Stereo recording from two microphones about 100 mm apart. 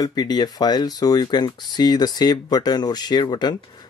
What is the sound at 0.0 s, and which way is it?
Speech, 45° left (ahead or behind).